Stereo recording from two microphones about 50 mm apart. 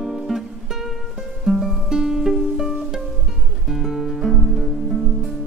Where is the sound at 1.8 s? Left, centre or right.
Centre.